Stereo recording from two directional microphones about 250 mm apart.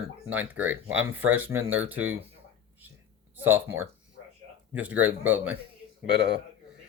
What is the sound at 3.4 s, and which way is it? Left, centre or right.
Speech, centre.